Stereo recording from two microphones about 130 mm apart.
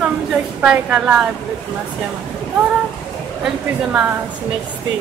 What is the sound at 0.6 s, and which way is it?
Speech, 10° right (ahead or behind).